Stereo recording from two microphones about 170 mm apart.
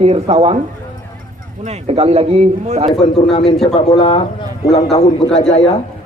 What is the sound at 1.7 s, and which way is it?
Speech, 40° right (ahead or behind).